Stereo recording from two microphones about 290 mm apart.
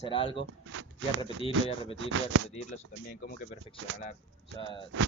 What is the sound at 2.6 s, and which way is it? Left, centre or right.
Speech, left.